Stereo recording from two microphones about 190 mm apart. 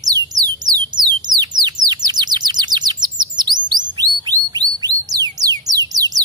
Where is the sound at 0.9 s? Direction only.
20° right (ahead or behind).